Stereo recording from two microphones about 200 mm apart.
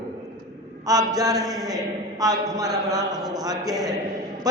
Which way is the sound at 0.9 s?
20° right (ahead or behind).